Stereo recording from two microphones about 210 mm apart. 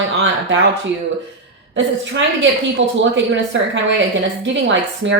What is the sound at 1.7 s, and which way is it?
A woman's voice, 60° right (ahead or behind).